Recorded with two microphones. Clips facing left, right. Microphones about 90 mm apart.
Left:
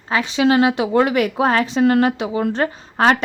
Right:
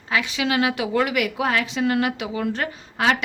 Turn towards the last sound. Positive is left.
turn(degrees=35)  # may be behind; listen again after turning